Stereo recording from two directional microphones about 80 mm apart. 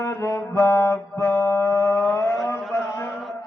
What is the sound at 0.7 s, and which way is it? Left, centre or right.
Music, left.